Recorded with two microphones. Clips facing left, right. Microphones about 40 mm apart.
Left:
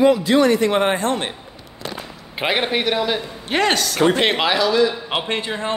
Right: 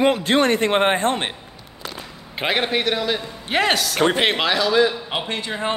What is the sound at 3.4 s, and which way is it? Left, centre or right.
Speech, centre.